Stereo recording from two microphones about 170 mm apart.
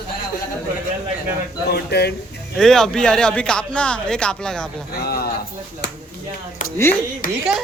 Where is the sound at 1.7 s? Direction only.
75° left (ahead or behind).